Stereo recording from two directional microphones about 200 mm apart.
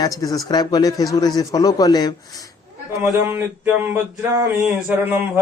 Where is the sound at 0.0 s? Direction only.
20° left (ahead or behind).